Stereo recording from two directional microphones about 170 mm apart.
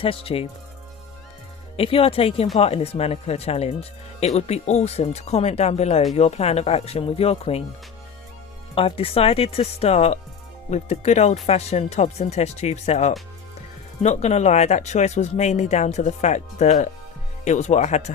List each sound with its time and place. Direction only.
0.0 s speech: 35° left (ahead or behind)
1.7 s speech: 35° left (ahead or behind)
8.7 s speech: 30° left (ahead or behind)